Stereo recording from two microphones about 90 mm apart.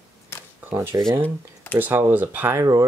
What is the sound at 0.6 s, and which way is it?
Speech, 25° right (ahead or behind).